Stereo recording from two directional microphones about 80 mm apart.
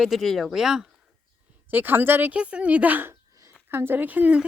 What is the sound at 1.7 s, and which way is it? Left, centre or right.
Speech, right.